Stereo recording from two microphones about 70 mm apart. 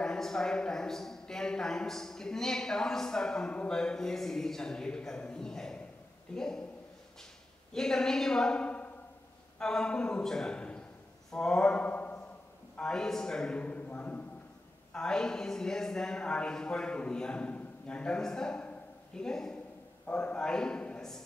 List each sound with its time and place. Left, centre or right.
0.0 s a man's voice: centre
7.7 s a woman's voice: centre
12.7 s a man's voice: centre
14.9 s a woman's voice: centre